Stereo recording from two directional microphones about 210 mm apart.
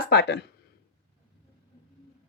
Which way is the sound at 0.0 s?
50° left (ahead or behind).